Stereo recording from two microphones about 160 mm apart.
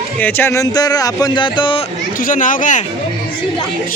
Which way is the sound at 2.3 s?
55° left (ahead or behind).